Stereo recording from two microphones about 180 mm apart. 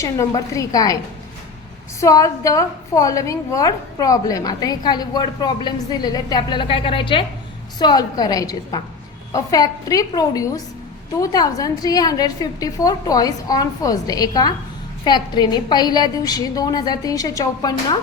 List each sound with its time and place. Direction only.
0.0 s a woman's voice: 15° left (ahead or behind)
2.0 s a woman's voice: 20° left (ahead or behind)